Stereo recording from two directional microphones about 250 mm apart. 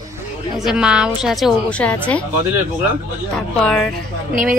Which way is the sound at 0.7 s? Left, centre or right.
Centre.